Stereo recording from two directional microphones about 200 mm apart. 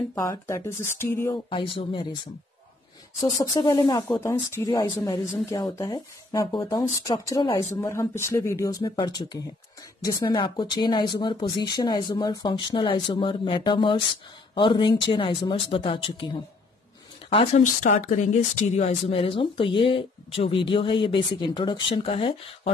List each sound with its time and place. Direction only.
0.1 s speech: 15° left (ahead or behind)
1.5 s speech: 25° left (ahead or behind)
3.3 s speech: 20° left (ahead or behind)
17.8 s speech: 40° left (ahead or behind)